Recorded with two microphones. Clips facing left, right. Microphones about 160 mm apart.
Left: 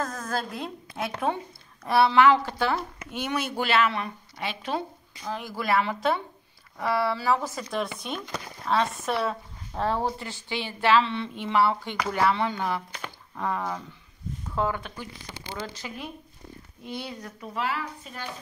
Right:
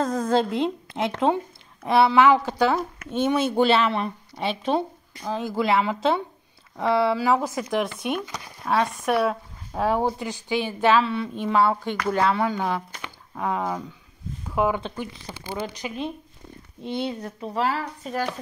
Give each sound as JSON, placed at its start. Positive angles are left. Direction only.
{"t": 0.0, "sound": "a woman's voice", "side_deg": -25}
{"t": 11.8, "sound": "speech", "side_deg": 15}
{"t": 12.3, "sound": "speech", "side_deg": -5}
{"t": 14.8, "sound": "speech", "side_deg": -25}